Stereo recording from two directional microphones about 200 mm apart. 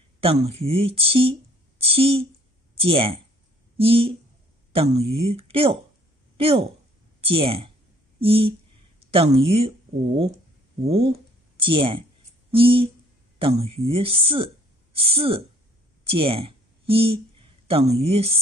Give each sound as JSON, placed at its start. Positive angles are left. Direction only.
{"t": 0.2, "sound": "a woman's voice", "side_deg": -30}
{"t": 13.4, "sound": "speech", "side_deg": -30}